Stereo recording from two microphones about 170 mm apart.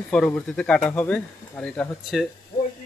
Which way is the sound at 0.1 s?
5° left (ahead or behind).